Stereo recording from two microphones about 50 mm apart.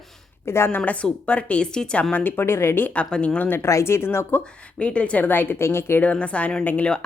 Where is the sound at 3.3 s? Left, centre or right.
Left.